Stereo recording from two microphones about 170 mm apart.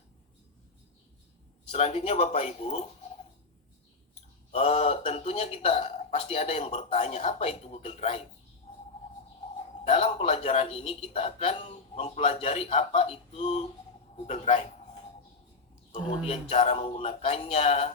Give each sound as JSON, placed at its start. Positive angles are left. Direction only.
{"t": 1.7, "sound": "speech", "side_deg": 40}
{"t": 4.5, "sound": "a man's voice", "side_deg": 40}
{"t": 9.8, "sound": "a man's voice", "side_deg": 40}
{"t": 16.0, "sound": "speech", "side_deg": 40}